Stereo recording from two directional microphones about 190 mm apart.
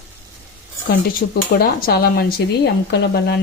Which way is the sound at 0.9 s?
50° left (ahead or behind).